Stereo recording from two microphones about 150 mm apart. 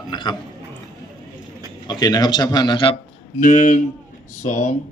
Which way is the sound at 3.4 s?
60° left (ahead or behind).